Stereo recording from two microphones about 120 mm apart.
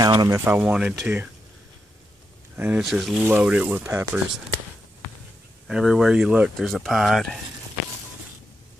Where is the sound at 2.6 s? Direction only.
15° right (ahead or behind).